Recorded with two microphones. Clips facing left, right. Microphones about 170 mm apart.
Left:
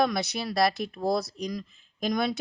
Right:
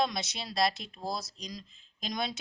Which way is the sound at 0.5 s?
60° left (ahead or behind).